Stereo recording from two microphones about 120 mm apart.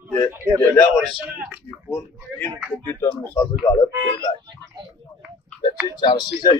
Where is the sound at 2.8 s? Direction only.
20° left (ahead or behind).